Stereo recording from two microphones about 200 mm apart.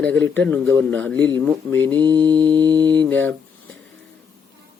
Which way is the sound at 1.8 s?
20° right (ahead or behind).